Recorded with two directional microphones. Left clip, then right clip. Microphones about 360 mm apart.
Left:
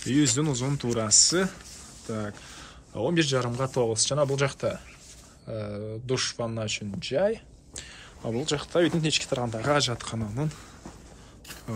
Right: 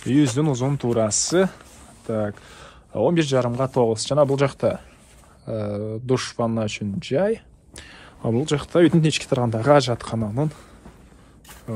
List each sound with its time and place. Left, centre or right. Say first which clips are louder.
0.0 s a man's voice: right 5 dB; centre
8.2 s speech: right 7 dB; right
8.5 s a man's voice: right 6 dB; centre